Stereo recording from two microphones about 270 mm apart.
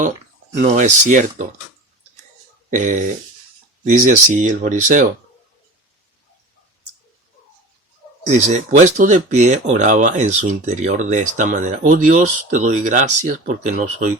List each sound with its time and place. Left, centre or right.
0.5 s speech: right
2.6 s a sound: right
3.8 s speech: right
8.3 s speech: right